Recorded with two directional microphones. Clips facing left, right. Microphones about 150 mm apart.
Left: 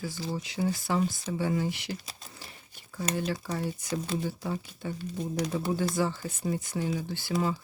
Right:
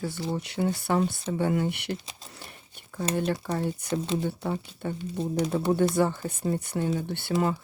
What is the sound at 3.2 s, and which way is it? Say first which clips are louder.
Speech: right 5 dB; 55° right (ahead or behind).